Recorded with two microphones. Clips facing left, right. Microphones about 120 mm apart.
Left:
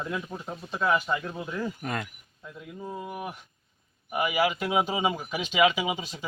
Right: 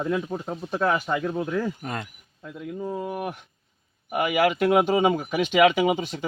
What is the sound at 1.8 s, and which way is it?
Speech, 25° right (ahead or behind).